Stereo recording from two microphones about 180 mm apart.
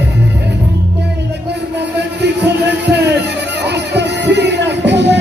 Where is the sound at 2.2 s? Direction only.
70° right (ahead or behind).